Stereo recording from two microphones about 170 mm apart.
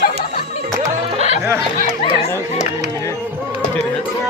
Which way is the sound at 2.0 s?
35° left (ahead or behind).